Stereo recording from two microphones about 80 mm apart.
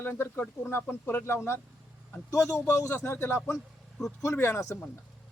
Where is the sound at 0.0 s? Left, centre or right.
Left.